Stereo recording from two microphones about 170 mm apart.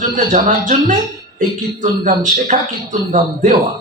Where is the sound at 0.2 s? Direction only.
50° right (ahead or behind).